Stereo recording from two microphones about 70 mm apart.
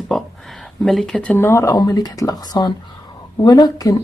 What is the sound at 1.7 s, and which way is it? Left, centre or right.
Speech, left.